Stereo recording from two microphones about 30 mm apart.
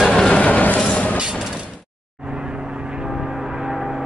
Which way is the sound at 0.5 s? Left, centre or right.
Left.